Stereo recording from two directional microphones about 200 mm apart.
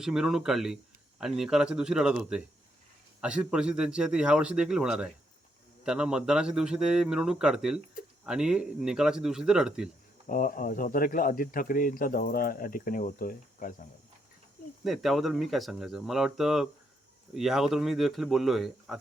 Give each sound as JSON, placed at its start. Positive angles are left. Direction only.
{"t": 0.0, "sound": "a man's voice", "side_deg": -5}
{"t": 10.2, "sound": "speech", "side_deg": 45}
{"t": 14.8, "sound": "a man's voice", "side_deg": 0}